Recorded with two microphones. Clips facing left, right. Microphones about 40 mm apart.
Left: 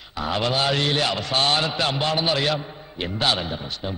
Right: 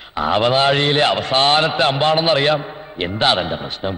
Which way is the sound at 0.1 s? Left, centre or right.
Right.